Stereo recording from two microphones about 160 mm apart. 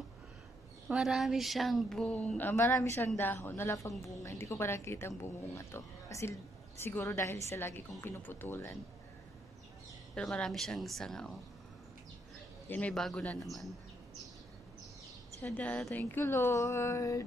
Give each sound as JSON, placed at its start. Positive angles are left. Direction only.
{"t": 0.8, "sound": "a woman's voice", "side_deg": -5}
{"t": 10.1, "sound": "speech", "side_deg": 5}
{"t": 12.6, "sound": "speech", "side_deg": 10}
{"t": 15.4, "sound": "a woman's voice", "side_deg": 10}